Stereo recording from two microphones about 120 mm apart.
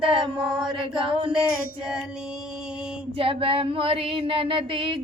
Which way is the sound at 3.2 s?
50° right (ahead or behind).